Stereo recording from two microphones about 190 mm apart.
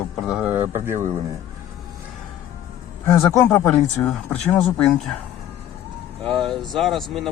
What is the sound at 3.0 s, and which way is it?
Speech, 15° left (ahead or behind).